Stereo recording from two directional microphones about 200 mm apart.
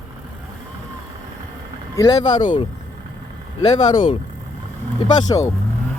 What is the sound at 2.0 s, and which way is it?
Speech, 20° left (ahead or behind).